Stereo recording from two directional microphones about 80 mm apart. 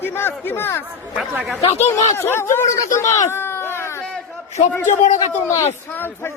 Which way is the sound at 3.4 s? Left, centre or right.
Left.